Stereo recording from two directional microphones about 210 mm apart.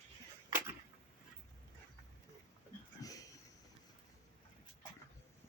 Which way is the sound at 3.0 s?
15° left (ahead or behind).